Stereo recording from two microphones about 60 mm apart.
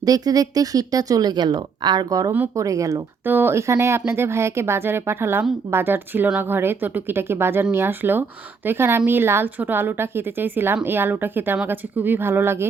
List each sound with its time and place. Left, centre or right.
0.0 s a woman's voice: right
2.0 s speech: right
2.6 s speech: right
3.2 s speech: right
3.5 s speech: right